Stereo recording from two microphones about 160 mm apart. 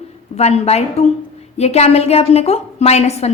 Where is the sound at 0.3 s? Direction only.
40° left (ahead or behind).